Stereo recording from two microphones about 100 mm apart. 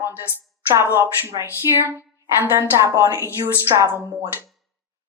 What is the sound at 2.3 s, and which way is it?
Speech, 25° right (ahead or behind).